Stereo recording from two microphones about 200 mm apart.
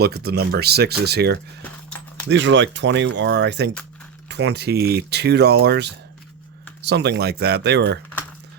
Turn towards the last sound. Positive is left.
turn(degrees=-55)  # may be behind; listen again after turning